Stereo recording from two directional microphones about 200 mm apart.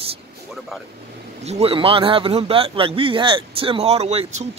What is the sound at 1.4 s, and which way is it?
A man's voice, 30° right (ahead or behind).